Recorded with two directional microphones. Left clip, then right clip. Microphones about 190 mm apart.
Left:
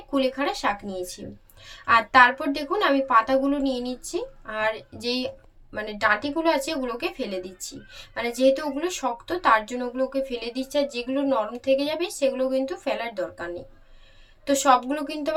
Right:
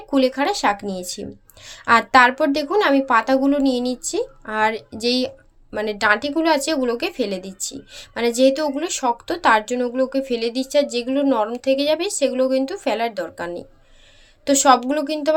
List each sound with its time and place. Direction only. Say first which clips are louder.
0.1 s a woman's voice: right 6 dB; 45° right (ahead or behind)